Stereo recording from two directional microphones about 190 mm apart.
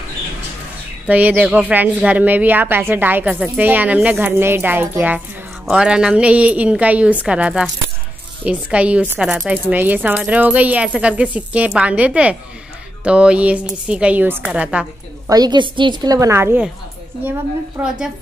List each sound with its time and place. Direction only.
1.0 s a woman's voice: 10° right (ahead or behind)
15.2 s a woman's voice: 20° right (ahead or behind)